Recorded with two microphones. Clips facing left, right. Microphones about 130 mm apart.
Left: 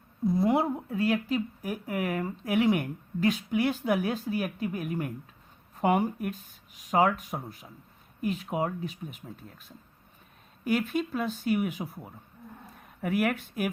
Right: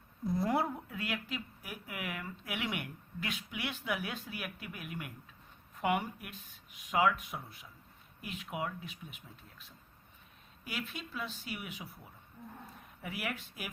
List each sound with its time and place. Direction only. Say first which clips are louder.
0.4 s a woman's voice: left 6 dB; 25° left (ahead or behind)
0.9 s speech: left 12 dB; 35° left (ahead or behind); by 13.7 s 55° left (ahead or behind)